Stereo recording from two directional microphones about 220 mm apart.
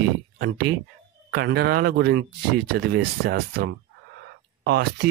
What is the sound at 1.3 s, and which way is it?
Speech, 50° right (ahead or behind).